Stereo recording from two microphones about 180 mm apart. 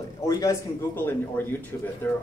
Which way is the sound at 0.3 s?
15° left (ahead or behind).